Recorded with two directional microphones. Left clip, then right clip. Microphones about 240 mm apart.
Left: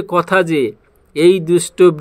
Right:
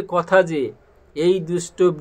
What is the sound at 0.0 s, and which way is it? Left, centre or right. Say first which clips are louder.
Speech: left 2 dB; left.